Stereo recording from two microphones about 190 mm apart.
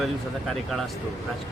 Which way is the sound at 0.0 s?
Centre (ahead or behind).